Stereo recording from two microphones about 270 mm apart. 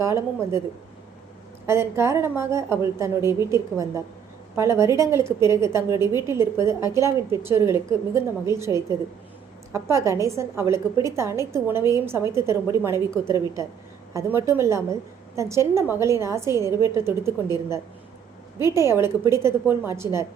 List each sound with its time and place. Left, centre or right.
0.0 s a woman's voice: centre
1.6 s a woman's voice: centre